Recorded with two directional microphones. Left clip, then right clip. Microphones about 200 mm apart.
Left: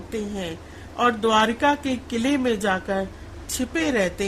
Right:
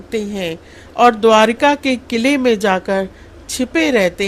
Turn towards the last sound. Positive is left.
turn(degrees=-25)  # may be behind; listen again after turning